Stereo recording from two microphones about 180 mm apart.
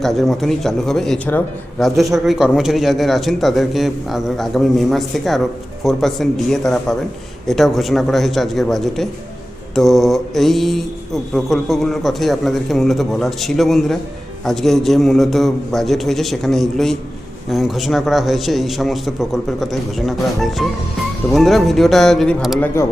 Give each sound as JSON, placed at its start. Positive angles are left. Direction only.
{"t": 0.0, "sound": "mantra", "side_deg": 0}
{"t": 22.6, "sound": "speech", "side_deg": 15}